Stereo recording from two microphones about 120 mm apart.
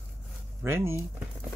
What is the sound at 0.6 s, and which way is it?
Speech, 20° right (ahead or behind).